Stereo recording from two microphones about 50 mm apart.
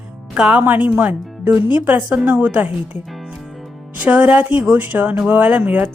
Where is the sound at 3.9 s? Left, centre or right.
Right.